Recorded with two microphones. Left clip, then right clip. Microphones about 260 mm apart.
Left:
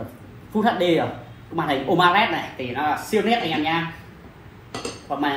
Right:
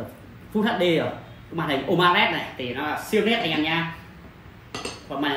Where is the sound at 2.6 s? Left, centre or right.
Left.